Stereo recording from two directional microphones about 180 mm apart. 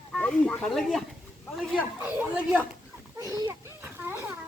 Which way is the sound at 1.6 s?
5° right (ahead or behind).